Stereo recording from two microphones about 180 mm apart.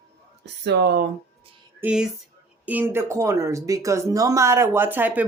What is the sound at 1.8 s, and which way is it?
Speech, 5° right (ahead or behind).